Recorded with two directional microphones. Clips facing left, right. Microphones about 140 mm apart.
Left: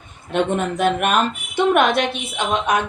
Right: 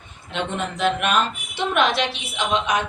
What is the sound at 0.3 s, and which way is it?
A woman's voice, 50° left (ahead or behind).